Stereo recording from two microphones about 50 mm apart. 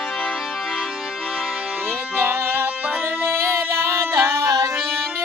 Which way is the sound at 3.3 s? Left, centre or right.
Right.